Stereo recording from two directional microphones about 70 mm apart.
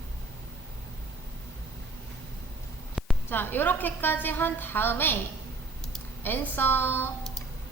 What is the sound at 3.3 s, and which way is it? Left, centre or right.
A woman's voice, left.